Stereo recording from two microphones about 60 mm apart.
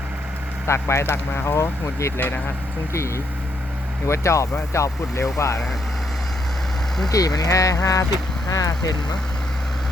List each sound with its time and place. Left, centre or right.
0.7 s speech: left
4.0 s speech: left
7.1 s speech: left
8.4 s speech: left